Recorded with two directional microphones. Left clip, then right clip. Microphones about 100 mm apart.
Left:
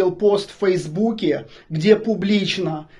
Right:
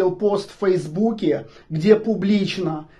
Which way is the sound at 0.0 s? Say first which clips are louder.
Left 2 dB; 15° left (ahead or behind).